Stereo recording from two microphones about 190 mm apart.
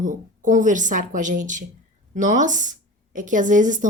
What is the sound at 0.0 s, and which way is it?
A woman's voice, 40° right (ahead or behind).